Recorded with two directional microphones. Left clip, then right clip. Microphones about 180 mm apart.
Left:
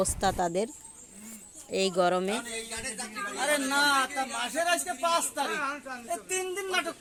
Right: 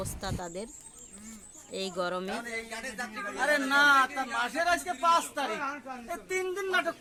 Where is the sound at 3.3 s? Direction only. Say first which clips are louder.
Right 2 dB; 35° left (ahead or behind).